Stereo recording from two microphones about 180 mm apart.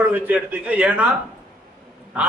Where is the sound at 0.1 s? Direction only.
10° right (ahead or behind).